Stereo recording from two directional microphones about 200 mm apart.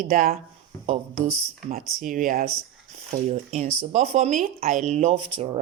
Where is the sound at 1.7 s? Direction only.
45° right (ahead or behind).